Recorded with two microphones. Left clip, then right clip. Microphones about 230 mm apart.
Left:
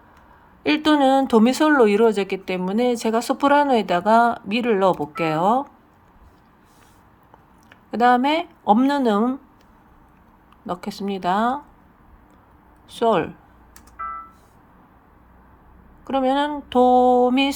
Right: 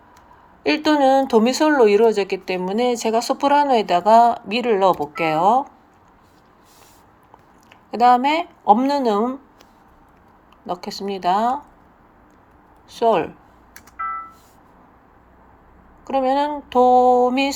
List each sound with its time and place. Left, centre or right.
0.6 s speech: left
7.7 s speech: left
10.7 s speech: left
12.9 s speech: left
16.0 s speech: left